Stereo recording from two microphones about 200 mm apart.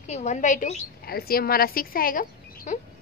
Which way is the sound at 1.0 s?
50° left (ahead or behind).